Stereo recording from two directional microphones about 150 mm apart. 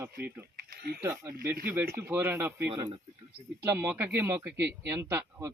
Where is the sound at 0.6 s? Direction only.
85° right.